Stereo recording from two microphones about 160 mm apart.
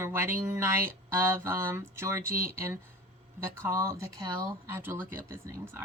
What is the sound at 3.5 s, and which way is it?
Speech, 15° right (ahead or behind).